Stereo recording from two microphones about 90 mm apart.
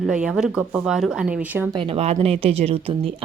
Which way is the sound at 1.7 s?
80° right.